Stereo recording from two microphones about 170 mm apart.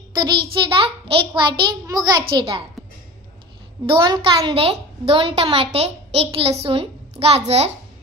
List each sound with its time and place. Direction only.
0.1 s a sound: 25° right (ahead or behind)
0.5 s a child's voice: 30° right (ahead or behind)
3.8 s a child's voice: 30° right (ahead or behind)